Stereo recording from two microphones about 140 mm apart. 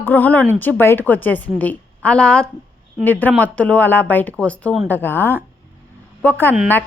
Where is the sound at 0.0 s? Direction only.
15° left (ahead or behind).